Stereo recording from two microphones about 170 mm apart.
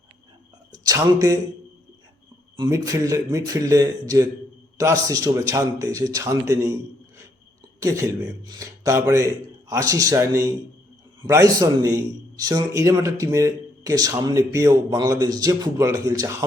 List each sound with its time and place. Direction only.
0.7 s speech: 20° right (ahead or behind)
2.6 s a man's voice: 20° right (ahead or behind)
7.8 s a man's voice: 20° right (ahead or behind)